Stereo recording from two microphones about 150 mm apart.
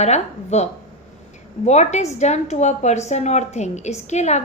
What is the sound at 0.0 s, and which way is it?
A woman's voice, 45° left (ahead or behind).